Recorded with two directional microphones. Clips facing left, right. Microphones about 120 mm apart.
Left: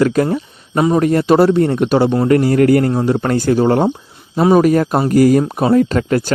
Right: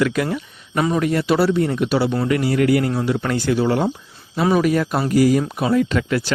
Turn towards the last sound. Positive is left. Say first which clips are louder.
# left 5 dB
turn(degrees=40)  # may be behind; listen again after turning